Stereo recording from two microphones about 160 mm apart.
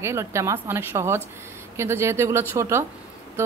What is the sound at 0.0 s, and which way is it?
A woman's voice, 15° right (ahead or behind).